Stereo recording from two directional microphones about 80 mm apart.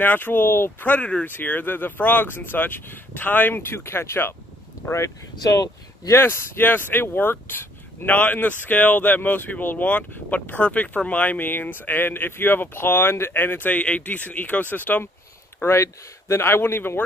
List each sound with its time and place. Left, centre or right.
0.0 s speech: left
5.4 s speech: left
6.1 s speech: left
15.6 s speech: left